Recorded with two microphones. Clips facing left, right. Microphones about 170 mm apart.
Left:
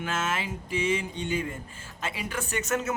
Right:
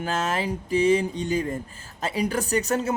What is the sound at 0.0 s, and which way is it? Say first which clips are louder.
Speech: right 5 dB; 35° right (ahead or behind).